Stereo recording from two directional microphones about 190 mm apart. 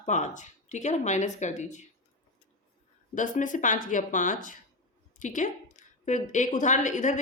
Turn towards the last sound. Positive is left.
turn(degrees=40)  # may be behind; listen again after turning